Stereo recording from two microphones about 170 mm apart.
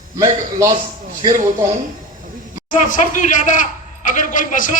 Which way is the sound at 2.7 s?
50° left (ahead or behind).